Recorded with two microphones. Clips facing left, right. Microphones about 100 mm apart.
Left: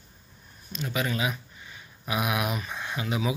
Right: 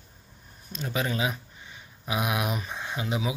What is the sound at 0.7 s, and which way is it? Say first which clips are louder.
A man's voice: even; 30° right (ahead or behind).